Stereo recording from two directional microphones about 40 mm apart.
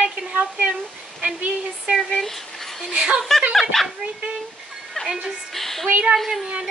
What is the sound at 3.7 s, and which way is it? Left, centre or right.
Speech, centre.